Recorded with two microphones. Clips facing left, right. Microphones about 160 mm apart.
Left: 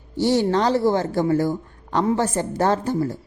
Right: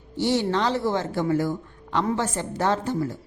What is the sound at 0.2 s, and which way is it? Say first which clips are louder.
A woman's voice: left 4 dB; 40° left (ahead or behind).